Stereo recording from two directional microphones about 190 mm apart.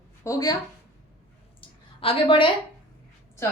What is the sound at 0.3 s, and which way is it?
Speech, 20° left (ahead or behind).